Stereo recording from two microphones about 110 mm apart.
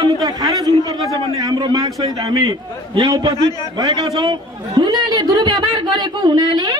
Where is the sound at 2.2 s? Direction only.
45° right (ahead or behind).